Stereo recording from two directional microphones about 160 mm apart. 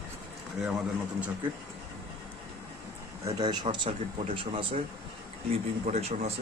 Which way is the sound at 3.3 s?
25° right (ahead or behind).